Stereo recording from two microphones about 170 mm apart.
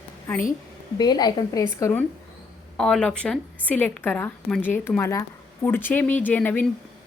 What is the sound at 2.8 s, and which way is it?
Speech, 5° left (ahead or behind).